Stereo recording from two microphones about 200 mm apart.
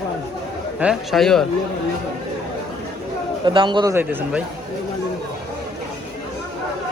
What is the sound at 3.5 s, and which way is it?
Speech, 25° right (ahead or behind).